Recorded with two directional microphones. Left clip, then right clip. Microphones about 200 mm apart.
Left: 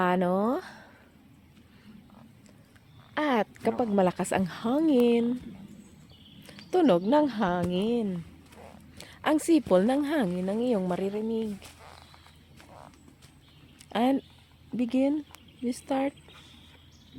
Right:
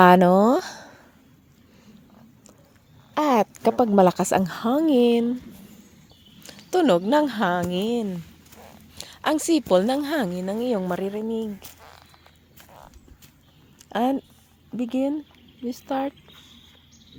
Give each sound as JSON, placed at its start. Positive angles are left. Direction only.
{"t": 0.0, "sound": "speech", "side_deg": -50}
{"t": 3.2, "sound": "speech", "side_deg": -35}
{"t": 6.7, "sound": "a woman's voice", "side_deg": -15}
{"t": 11.6, "sound": "a sound", "side_deg": -60}
{"t": 13.9, "sound": "a woman's voice", "side_deg": -10}